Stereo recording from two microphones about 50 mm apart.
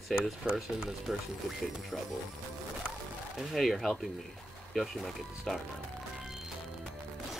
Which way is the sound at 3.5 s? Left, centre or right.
Centre.